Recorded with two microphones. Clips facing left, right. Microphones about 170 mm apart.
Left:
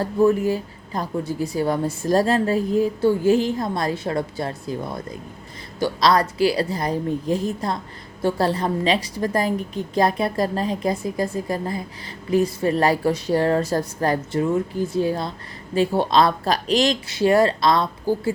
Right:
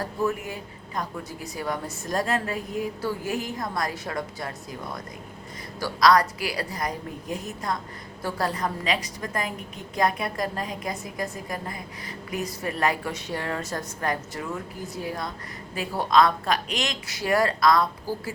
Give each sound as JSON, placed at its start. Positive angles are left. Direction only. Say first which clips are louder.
{"t": 0.0, "sound": "a woman's voice", "louder": "left 10 dB", "side_deg": 30}